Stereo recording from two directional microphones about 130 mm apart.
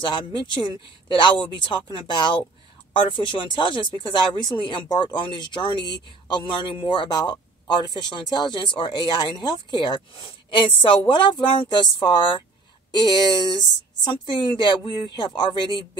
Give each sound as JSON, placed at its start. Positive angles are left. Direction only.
{"t": 0.7, "sound": "speech", "side_deg": 35}